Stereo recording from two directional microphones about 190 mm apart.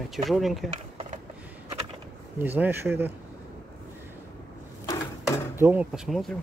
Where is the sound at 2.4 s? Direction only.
10° right (ahead or behind).